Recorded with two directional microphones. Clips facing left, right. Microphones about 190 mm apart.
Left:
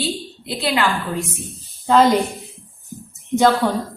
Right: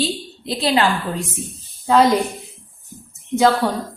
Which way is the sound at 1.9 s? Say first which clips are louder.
Even; centre (ahead or behind).